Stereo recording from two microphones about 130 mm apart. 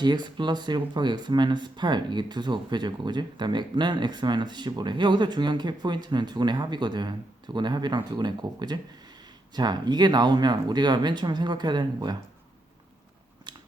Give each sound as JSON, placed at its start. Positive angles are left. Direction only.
{"t": 0.0, "sound": "speech", "side_deg": -35}